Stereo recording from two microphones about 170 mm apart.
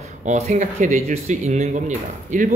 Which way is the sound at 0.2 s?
45° right (ahead or behind).